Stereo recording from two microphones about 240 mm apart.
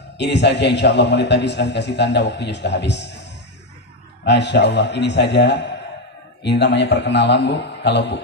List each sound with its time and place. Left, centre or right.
0.2 s a man's voice: left
4.2 s a man's voice: left